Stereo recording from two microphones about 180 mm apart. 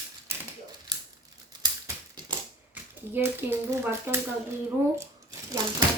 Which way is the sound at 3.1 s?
15° right (ahead or behind).